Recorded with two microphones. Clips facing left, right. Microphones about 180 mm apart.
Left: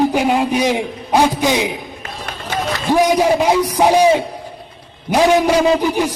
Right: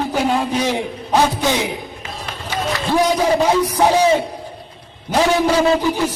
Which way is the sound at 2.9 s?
10° left (ahead or behind).